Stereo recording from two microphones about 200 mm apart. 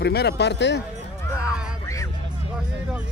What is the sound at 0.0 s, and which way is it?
Speech, 55° left (ahead or behind).